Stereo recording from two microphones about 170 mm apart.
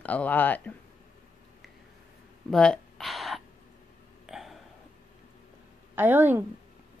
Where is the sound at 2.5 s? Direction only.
5° left (ahead or behind).